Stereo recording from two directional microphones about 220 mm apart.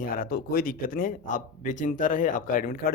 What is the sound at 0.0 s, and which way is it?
A man's voice, 40° left (ahead or behind).